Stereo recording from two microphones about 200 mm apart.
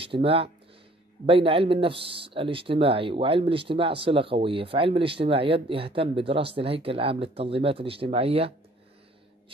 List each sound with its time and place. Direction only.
0.0 s speech: 25° right (ahead or behind)